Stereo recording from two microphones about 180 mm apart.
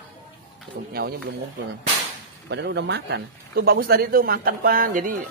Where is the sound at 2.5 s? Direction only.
70° right (ahead or behind).